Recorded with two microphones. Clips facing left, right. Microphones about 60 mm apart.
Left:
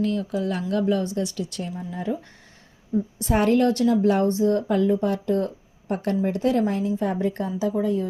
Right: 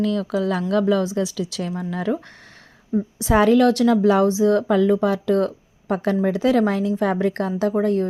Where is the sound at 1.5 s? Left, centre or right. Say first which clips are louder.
Right 5 dB; right.